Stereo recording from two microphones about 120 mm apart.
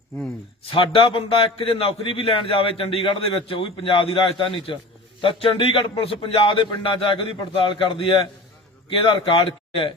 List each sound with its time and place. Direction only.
0.7 s a man's voice: 50° left (ahead or behind)